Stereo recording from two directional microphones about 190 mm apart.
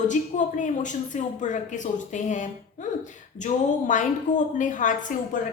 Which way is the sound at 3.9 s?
40° left (ahead or behind).